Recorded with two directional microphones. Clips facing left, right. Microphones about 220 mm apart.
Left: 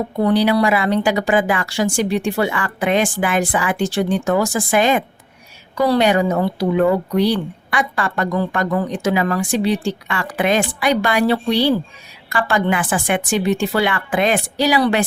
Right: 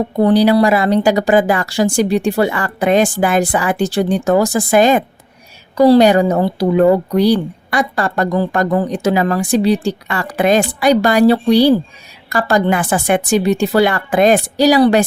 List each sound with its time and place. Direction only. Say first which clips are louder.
0.2 s a woman's voice: right 5 dB; 35° right (ahead or behind)